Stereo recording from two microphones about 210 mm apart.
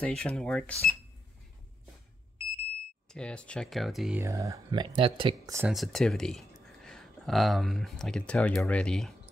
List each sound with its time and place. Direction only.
0.0 s speech: 5° left (ahead or behind)
3.1 s speech: 5° left (ahead or behind)
4.2 s speech: 15° right (ahead or behind)
5.6 s speech: centre (ahead or behind)